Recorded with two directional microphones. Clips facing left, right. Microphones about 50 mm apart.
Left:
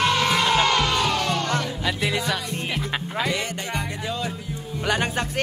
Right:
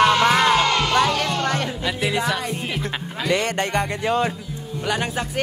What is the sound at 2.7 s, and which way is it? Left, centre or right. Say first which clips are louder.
Speech: even; centre.